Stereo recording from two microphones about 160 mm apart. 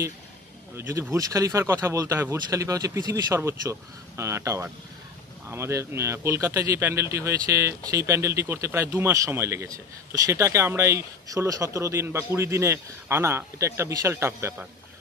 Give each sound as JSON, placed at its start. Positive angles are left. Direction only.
{"t": 0.7, "sound": "speech", "side_deg": -15}